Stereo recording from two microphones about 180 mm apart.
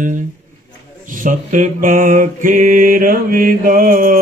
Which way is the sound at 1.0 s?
50° right (ahead or behind).